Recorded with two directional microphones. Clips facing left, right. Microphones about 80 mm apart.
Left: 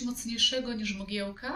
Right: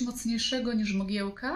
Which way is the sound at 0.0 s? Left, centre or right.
Right.